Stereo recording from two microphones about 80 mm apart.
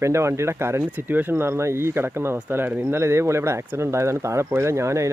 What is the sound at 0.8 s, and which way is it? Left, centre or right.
Speech, right.